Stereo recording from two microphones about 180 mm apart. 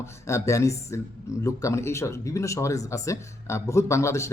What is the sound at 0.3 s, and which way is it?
A man's voice, 15° left (ahead or behind).